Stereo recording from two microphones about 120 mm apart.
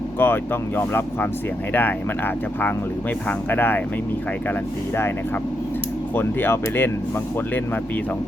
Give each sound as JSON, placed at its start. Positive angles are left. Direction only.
{"t": 0.2, "sound": "speech", "side_deg": 20}
{"t": 6.1, "sound": "speech", "side_deg": 20}